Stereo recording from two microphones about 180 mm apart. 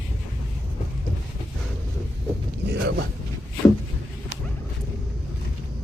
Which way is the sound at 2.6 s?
70° right (ahead or behind).